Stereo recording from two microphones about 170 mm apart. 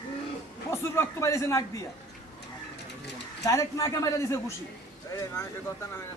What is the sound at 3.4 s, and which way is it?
A man's voice, 20° left (ahead or behind).